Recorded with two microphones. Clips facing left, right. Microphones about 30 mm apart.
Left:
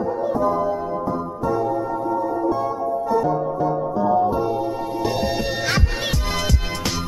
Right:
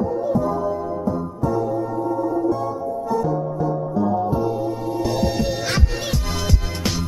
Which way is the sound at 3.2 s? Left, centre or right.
Centre.